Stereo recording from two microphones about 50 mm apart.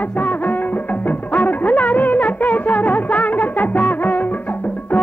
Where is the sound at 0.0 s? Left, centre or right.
Left.